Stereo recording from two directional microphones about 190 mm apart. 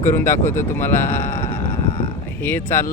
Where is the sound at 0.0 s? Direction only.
15° left (ahead or behind).